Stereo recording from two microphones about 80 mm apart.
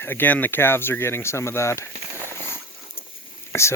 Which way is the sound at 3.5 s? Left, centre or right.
Left.